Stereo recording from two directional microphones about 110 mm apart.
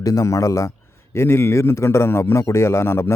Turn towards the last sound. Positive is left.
turn(degrees=25)  # may be behind; listen again after turning